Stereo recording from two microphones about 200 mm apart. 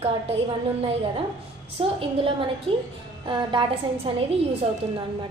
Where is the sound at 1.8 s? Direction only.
25° right (ahead or behind).